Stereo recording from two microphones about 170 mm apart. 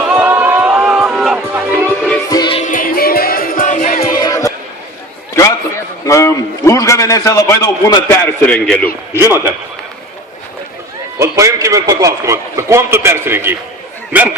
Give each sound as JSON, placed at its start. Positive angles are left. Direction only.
{"t": 0.0, "sound": "a sound", "side_deg": -10}
{"t": 2.3, "sound": "music", "side_deg": 25}
{"t": 2.6, "sound": "music", "side_deg": 50}
{"t": 4.2, "sound": "a sound", "side_deg": 20}
{"t": 9.1, "sound": "a man's voice", "side_deg": -15}
{"t": 11.2, "sound": "a man's voice", "side_deg": -20}